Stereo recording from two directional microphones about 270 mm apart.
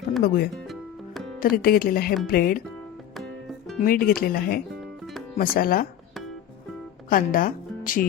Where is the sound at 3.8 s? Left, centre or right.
Left.